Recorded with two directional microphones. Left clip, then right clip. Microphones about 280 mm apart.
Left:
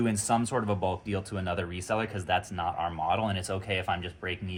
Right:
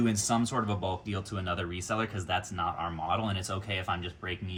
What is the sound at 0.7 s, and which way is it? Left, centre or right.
Speech, centre.